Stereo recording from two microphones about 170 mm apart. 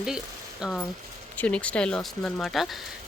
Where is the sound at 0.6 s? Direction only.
5° left (ahead or behind).